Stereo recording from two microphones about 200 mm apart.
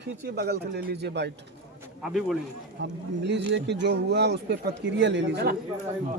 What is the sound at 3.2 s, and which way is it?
A man's voice, 60° right (ahead or behind).